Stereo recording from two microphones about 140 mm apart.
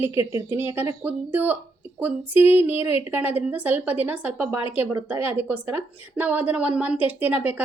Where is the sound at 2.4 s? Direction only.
45° left (ahead or behind).